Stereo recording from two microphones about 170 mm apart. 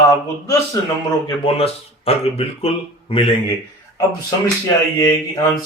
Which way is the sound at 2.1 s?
35° left (ahead or behind).